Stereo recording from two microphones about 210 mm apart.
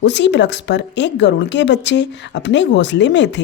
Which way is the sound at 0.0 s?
55° left (ahead or behind).